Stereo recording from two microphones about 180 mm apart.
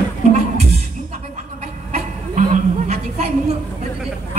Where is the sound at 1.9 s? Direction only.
40° right (ahead or behind).